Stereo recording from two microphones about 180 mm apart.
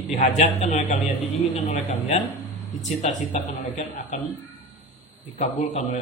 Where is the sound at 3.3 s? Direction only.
40° left (ahead or behind).